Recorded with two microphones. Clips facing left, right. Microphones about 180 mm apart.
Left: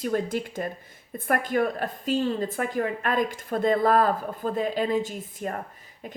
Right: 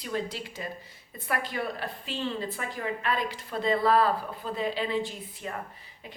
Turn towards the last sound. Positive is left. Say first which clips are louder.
# left 5 dB
turn(degrees=45)  # may be behind; listen again after turning